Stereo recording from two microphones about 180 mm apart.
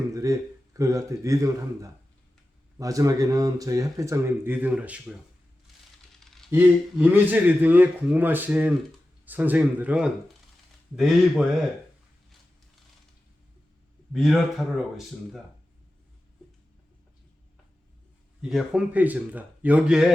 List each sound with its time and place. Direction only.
0.1 s a man's voice: 20° right (ahead or behind)
6.5 s a man's voice: 10° right (ahead or behind)
14.1 s speech: centre (ahead or behind)
18.4 s a man's voice: 5° right (ahead or behind)